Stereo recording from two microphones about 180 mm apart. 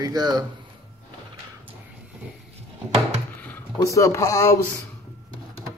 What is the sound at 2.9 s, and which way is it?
Wood, 10° left (ahead or behind).